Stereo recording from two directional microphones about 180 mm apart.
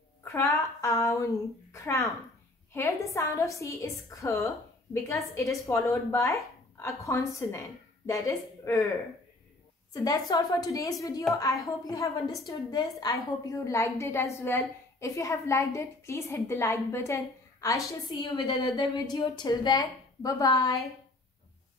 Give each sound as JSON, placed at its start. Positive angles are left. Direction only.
{"t": 0.2, "sound": "a woman's voice", "side_deg": 15}
{"t": 10.0, "sound": "a woman's voice", "side_deg": 20}